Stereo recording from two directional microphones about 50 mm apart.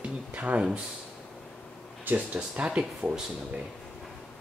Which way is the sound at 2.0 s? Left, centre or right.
Right.